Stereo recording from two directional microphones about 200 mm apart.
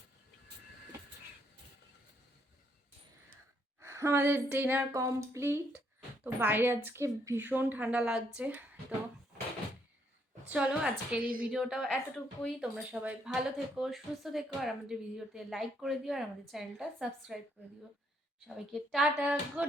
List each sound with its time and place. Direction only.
3.8 s a woman's voice: 15° right (ahead or behind)
10.5 s speech: 5° right (ahead or behind)
11.2 s speech: 45° right (ahead or behind)
11.4 s speech: centre (ahead or behind)
18.4 s speech: centre (ahead or behind)